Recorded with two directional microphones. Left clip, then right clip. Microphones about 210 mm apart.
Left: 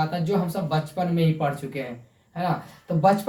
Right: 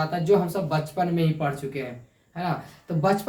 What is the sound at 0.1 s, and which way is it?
Speech, 10° right (ahead or behind).